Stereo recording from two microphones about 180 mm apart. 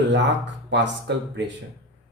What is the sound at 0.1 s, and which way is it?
Speech, 80° right.